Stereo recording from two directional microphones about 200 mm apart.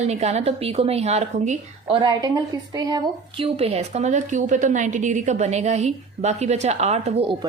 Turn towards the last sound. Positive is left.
turn(degrees=-35)  # may be behind; listen again after turning